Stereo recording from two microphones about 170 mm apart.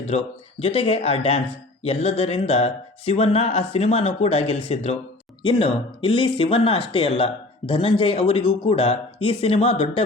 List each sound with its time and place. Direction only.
0.0 s speech: 35° left (ahead or behind)